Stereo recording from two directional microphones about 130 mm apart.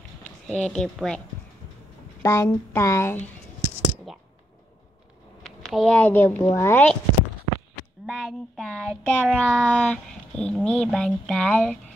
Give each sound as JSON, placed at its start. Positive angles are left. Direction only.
{"t": 0.5, "sound": "child singing", "side_deg": 5}
{"t": 2.2, "sound": "speech", "side_deg": 20}
{"t": 4.1, "sound": "clicking", "side_deg": 0}
{"t": 5.4, "sound": "speech", "side_deg": 0}
{"t": 8.1, "sound": "child singing", "side_deg": 0}